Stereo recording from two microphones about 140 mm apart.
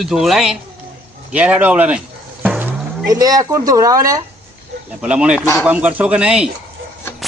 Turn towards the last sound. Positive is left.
turn(degrees=-5)  # may be behind; listen again after turning